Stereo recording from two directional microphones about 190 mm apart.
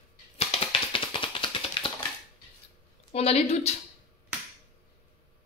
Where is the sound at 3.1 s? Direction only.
30° left (ahead or behind).